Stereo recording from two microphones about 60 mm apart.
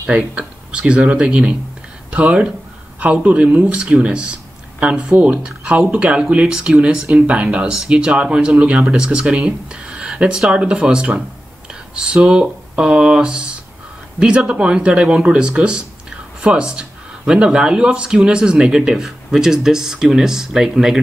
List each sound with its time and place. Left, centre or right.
0.0 s speech: centre